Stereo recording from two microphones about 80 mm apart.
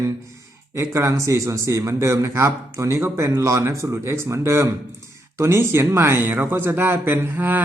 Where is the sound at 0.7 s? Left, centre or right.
Right.